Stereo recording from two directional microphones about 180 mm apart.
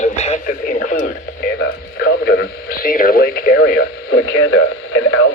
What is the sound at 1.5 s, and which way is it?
Radio, 60° left (ahead or behind).